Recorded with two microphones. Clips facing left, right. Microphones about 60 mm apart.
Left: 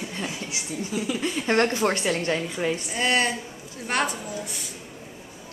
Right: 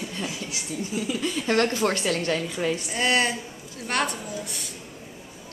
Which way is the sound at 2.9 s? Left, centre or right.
Centre.